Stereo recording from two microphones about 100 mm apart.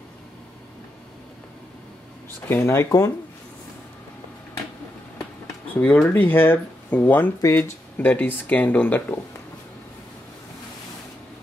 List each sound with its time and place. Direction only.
2.4 s speech: 25° left (ahead or behind)
5.8 s speech: 15° left (ahead or behind)
7.4 s speech: 30° left (ahead or behind)
8.0 s speech: 20° left (ahead or behind)